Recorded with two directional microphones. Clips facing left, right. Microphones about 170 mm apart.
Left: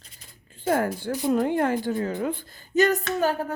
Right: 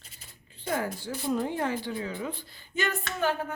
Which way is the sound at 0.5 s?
50° left (ahead or behind).